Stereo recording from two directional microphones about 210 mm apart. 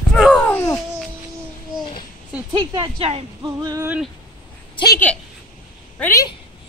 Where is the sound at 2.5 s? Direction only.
25° right (ahead or behind).